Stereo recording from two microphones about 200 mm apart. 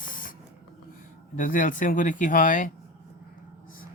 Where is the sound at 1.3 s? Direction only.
40° left (ahead or behind).